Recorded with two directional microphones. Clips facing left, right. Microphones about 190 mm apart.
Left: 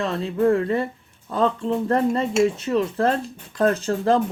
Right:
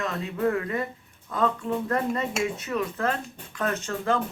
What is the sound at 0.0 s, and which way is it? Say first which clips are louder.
Speech: left 6 dB; 30° left (ahead or behind).